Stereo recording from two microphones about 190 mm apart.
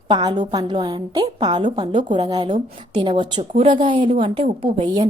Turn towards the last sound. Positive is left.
turn(degrees=-25)  # may be behind; listen again after turning